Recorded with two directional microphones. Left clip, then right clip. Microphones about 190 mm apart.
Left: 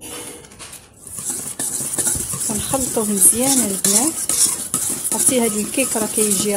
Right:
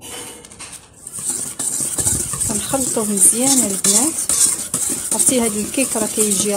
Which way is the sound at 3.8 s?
Centre (ahead or behind).